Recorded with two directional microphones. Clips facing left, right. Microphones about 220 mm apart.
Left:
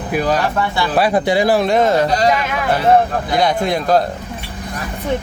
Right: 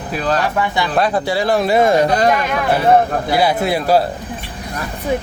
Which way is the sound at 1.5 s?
Centre (ahead or behind).